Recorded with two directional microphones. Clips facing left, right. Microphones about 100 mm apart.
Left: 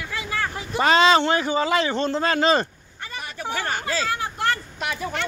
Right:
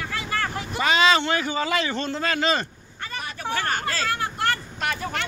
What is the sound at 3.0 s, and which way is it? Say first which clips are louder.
Hubbub: right 1 dB; 15° left (ahead or behind).